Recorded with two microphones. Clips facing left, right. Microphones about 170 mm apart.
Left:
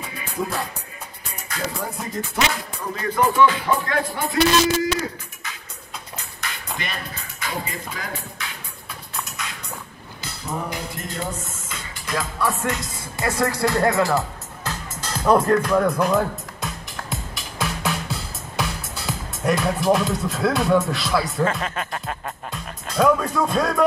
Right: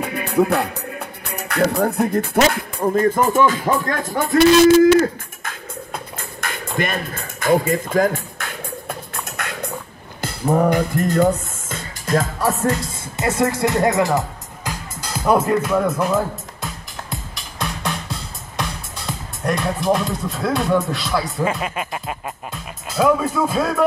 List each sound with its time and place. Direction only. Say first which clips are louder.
0.0 s music: right 10 dB; 65° right (ahead or behind); by 12.8 s 35° right (ahead or behind)
13.2 s music: right 3 dB; 20° right (ahead or behind); by 21.5 s centre (ahead or behind)
21.5 s speech: right 2 dB; 10° right (ahead or behind)